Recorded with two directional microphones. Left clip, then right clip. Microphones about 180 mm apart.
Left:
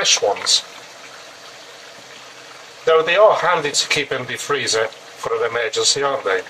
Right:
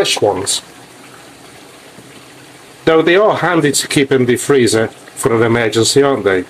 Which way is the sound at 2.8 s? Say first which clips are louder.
Right 3 dB; 50° right (ahead or behind).